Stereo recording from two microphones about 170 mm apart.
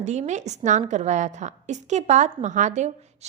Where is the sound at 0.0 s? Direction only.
40° right (ahead or behind).